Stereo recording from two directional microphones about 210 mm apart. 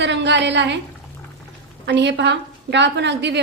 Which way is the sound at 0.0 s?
55° right (ahead or behind).